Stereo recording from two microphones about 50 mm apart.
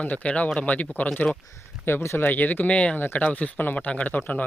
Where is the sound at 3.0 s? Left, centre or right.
Left.